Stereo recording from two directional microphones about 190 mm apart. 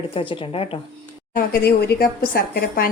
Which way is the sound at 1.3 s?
50° left (ahead or behind).